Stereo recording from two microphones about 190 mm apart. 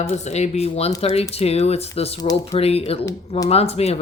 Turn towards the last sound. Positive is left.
turn(degrees=35)  # may be behind; listen again after turning